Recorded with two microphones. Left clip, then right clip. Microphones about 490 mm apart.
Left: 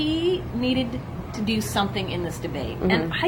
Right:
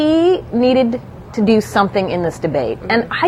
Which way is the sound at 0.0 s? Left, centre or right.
Right.